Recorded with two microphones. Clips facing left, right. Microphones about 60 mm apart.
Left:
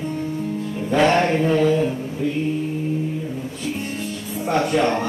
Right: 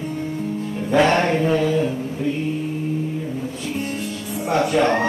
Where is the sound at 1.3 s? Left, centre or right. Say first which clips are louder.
Left 1 dB; centre.